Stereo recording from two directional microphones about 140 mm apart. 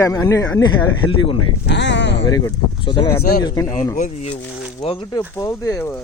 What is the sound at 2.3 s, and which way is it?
A man's voice, 30° left (ahead or behind).